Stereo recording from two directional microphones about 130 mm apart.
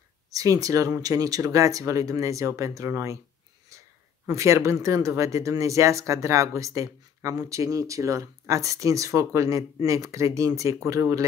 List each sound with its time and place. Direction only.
0.3 s speech: 25° right (ahead or behind)
3.7 s a sound: 25° right (ahead or behind)
4.3 s speech: 25° right (ahead or behind)